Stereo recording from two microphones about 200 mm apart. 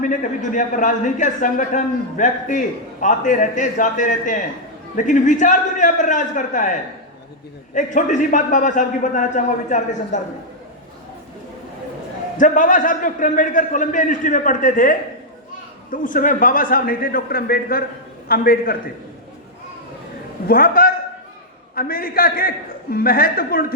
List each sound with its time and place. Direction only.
0.0 s a man's voice: 40° left (ahead or behind)
12.4 s a man's voice: 40° left (ahead or behind)
20.5 s a man's voice: 45° left (ahead or behind)